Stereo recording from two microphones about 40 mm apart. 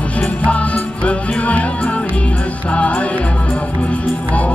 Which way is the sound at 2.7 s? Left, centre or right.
Left.